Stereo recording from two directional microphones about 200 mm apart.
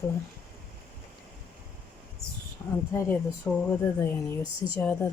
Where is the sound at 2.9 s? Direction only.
15° left (ahead or behind).